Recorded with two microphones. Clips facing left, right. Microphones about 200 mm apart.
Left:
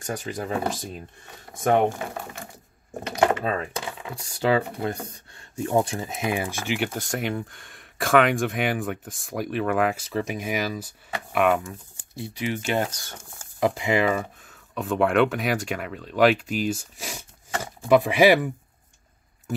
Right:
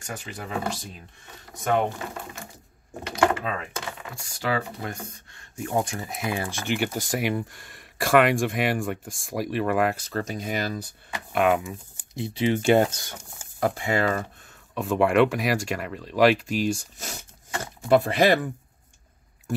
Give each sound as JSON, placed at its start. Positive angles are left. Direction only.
{"t": 0.0, "sound": "speech", "side_deg": 40}
{"t": 1.6, "sound": "speech", "side_deg": 50}
{"t": 3.4, "sound": "speech", "side_deg": 40}
{"t": 6.6, "sound": "speech", "side_deg": 0}
{"t": 10.1, "sound": "speech", "side_deg": 10}
{"t": 11.3, "sound": "speech", "side_deg": 0}
{"t": 12.1, "sound": "speech", "side_deg": -25}
{"t": 13.6, "sound": "speech", "side_deg": 20}
{"t": 14.8, "sound": "speech", "side_deg": 0}